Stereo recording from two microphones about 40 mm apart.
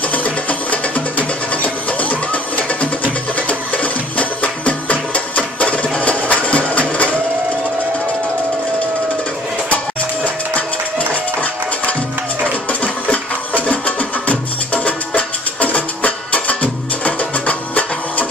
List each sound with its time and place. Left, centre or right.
0.1 s music: left
13.7 s music: left